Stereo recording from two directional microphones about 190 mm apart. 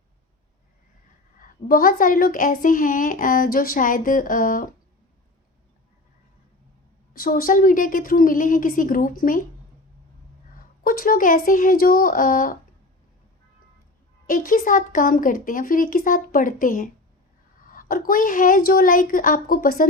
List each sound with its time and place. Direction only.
1.4 s speech: 50° left (ahead or behind)
7.1 s speech: 50° left (ahead or behind)
10.8 s speech: 50° left (ahead or behind)
14.3 s speech: 45° left (ahead or behind)